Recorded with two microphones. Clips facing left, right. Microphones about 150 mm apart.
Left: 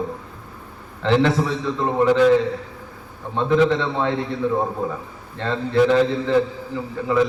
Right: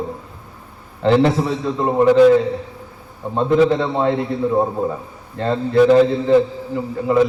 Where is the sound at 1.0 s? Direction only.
40° right (ahead or behind).